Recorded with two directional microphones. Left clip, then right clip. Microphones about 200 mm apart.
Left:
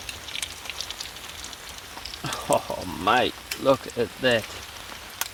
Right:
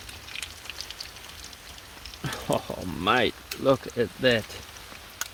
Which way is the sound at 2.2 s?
55° right (ahead or behind).